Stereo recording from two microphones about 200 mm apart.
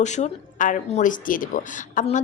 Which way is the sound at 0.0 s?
35° left (ahead or behind).